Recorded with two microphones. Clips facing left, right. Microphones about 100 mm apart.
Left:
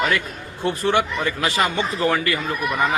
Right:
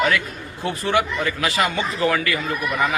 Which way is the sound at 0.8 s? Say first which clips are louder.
Even; 25° left (ahead or behind).